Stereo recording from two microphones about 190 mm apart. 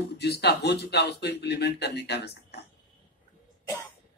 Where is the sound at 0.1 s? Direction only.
60° left (ahead or behind).